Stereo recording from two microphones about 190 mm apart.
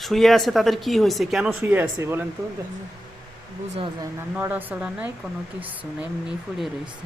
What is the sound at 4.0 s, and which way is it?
Speech, 15° right (ahead or behind).